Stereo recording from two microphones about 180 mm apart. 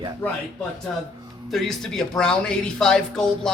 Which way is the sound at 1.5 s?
Centre (ahead or behind).